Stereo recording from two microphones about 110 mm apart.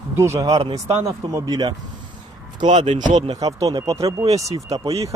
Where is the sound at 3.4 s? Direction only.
35° right (ahead or behind).